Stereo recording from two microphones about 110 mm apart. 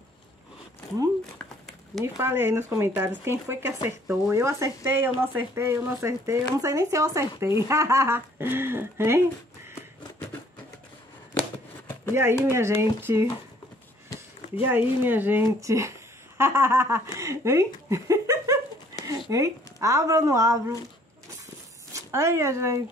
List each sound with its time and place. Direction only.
2.1 s speech: 20° right (ahead or behind)
12.1 s speech: 20° right (ahead or behind)
14.6 s speech: 20° right (ahead or behind)
18.9 s a sound: 30° right (ahead or behind)
19.3 s speech: 30° right (ahead or behind)
21.9 s speech: 25° right (ahead or behind)